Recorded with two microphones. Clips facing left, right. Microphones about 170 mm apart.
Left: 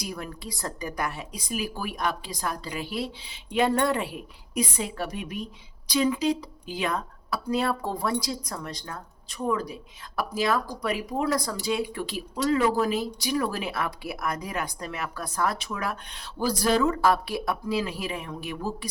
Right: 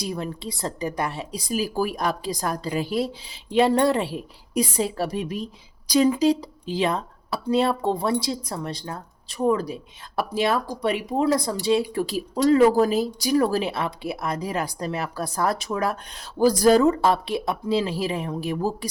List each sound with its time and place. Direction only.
0.0 s speech: 25° right (ahead or behind); by 3.1 s 40° right (ahead or behind)
3.5 s speech: 30° right (ahead or behind)
16.9 s speech: 25° right (ahead or behind)